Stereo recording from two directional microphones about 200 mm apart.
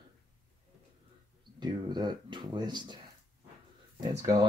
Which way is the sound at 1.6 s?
20° right (ahead or behind).